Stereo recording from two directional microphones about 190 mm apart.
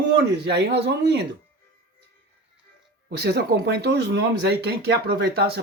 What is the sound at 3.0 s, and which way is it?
Speech, 60° right (ahead or behind).